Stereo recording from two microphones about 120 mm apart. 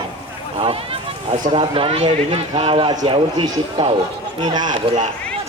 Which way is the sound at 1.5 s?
45° right (ahead or behind).